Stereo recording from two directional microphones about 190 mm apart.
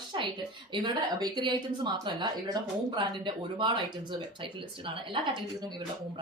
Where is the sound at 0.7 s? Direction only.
25° right (ahead or behind).